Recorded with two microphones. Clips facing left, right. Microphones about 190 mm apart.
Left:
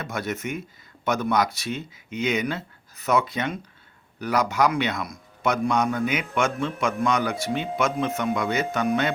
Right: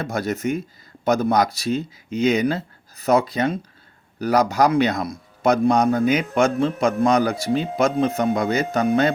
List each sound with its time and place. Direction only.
0.0 s a man's voice: 35° right (ahead or behind)